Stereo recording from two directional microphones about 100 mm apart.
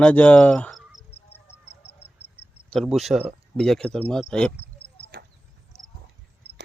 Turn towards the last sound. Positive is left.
turn(degrees=5)  # may be behind; listen again after turning